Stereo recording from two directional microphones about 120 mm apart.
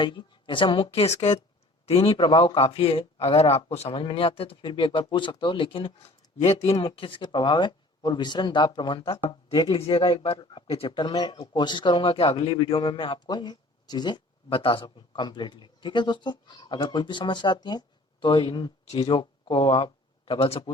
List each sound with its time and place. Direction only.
0.0 s speech: 40° left (ahead or behind)
1.0 s speech: 70° left (ahead or behind)
1.9 s speech: 50° left (ahead or behind)
6.0 s speech: 60° left (ahead or behind)